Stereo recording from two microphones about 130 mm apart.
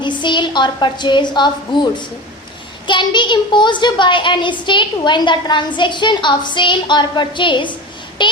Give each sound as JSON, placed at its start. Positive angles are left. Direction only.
{"t": 0.0, "sound": "a woman's voice", "side_deg": 35}